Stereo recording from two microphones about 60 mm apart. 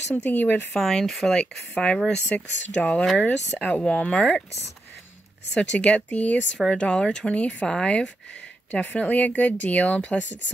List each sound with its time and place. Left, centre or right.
0.1 s speech: left
0.7 s speech: centre
1.3 s speech: centre
2.9 s speech: centre
5.6 s speech: centre
6.7 s speech: centre